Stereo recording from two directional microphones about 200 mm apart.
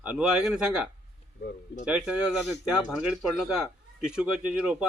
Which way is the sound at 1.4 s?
50° left (ahead or behind).